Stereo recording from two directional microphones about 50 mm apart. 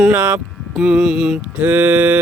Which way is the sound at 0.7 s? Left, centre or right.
Centre.